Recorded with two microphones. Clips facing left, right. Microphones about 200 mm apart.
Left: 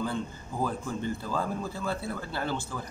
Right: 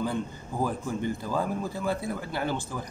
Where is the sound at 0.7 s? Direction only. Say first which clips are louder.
Right 2 dB; 15° right (ahead or behind).